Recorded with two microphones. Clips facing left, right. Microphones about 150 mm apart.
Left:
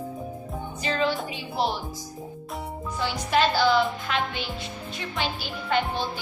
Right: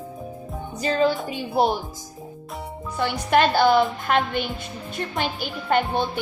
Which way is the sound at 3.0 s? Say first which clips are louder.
Right 4 dB; 55° right (ahead or behind).